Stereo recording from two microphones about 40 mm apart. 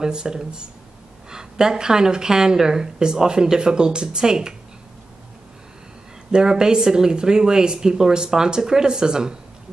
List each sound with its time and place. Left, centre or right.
0.0 s a woman's voice: centre
6.3 s a woman's voice: right